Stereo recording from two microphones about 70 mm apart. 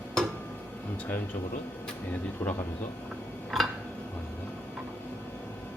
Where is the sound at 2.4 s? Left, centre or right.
Left.